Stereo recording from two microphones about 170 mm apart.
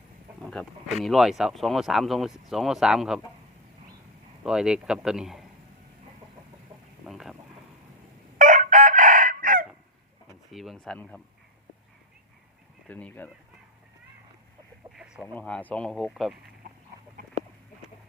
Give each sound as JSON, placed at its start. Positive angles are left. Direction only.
{"t": 0.5, "sound": "speech", "side_deg": 0}
{"t": 4.4, "sound": "speech", "side_deg": -5}
{"t": 7.0, "sound": "a sound", "side_deg": 0}
{"t": 8.4, "sound": "chicken", "side_deg": -50}
{"t": 10.5, "sound": "speech", "side_deg": 0}
{"t": 12.9, "sound": "speech", "side_deg": 10}
{"t": 14.9, "sound": "chicken", "side_deg": -5}
{"t": 15.4, "sound": "speech", "side_deg": 10}